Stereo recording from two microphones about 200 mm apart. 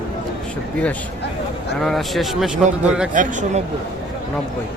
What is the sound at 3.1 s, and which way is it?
Speech, 40° right (ahead or behind).